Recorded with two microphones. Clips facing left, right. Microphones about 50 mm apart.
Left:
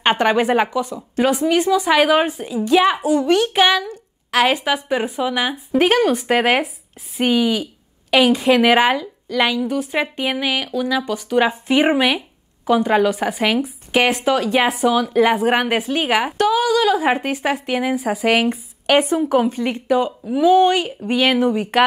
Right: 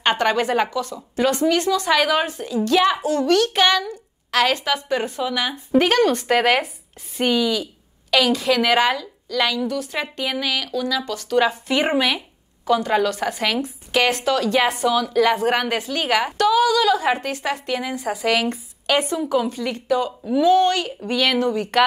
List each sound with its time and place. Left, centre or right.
0.0 s a woman's voice: left
17.1 s speech: left
17.9 s speech: centre
18.9 s speech: left
20.1 s speech: centre